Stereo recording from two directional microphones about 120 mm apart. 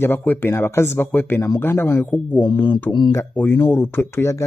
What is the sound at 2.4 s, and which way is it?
Speech, 40° left (ahead or behind).